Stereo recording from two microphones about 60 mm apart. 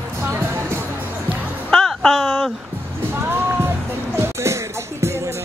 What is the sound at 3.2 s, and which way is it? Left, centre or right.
Music, right.